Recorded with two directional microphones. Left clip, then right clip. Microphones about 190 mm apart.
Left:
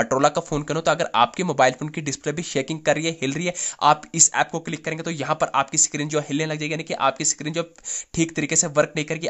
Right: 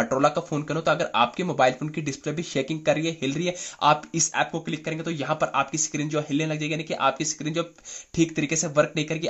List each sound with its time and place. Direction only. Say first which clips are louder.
0.0 s speech: left 3 dB; 25° left (ahead or behind)